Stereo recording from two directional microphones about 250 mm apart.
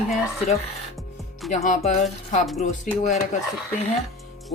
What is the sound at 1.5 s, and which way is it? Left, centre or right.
Speech, left.